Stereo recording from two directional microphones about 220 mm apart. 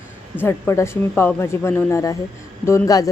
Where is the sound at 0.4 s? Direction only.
10° left (ahead or behind).